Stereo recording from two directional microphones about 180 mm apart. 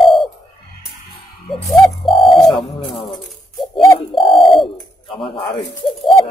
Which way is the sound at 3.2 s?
Centre (ahead or behind).